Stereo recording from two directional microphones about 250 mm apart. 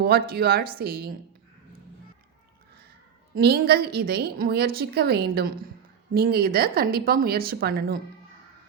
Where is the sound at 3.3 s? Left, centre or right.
Right.